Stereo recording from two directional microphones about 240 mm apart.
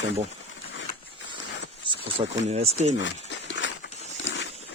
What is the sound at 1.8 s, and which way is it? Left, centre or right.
Speech, right.